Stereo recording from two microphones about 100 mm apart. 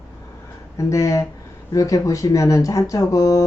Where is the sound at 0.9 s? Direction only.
30° left (ahead or behind).